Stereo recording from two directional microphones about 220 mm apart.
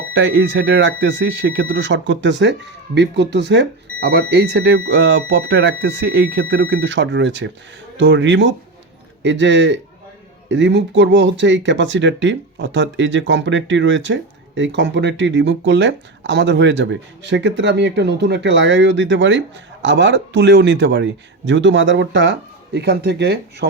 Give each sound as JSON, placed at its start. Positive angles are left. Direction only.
{"t": 0.1, "sound": "speech", "side_deg": -55}